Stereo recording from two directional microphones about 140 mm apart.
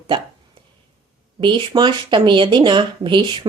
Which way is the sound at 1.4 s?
35° right (ahead or behind).